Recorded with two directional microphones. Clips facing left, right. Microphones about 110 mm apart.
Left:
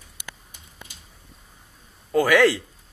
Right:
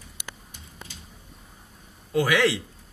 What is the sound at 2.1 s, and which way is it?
Speech, 50° left (ahead or behind).